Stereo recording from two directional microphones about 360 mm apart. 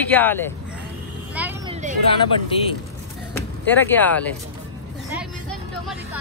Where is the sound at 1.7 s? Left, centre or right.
Centre.